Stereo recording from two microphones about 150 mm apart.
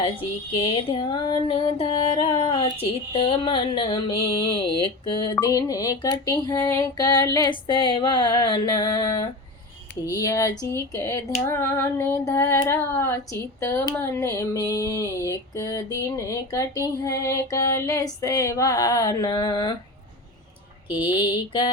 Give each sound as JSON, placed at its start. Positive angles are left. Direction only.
{"t": 0.5, "sound": "music", "side_deg": 35}
{"t": 10.1, "sound": "female singing", "side_deg": 25}
{"t": 13.9, "sound": "a sound", "side_deg": 15}
{"t": 21.0, "sound": "music", "side_deg": 30}